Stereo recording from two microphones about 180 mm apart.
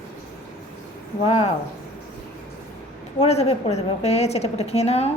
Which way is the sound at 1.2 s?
35° left (ahead or behind).